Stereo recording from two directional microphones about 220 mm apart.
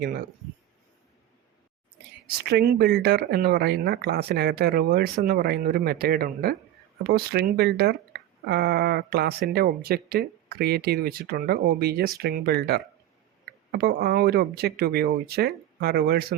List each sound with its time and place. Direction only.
0.0 s speech: 40° right (ahead or behind)
2.2 s speech: 45° right (ahead or behind)